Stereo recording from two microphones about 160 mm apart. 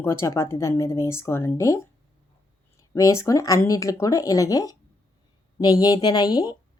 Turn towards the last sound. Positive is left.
turn(degrees=25)  # may be behind; listen again after turning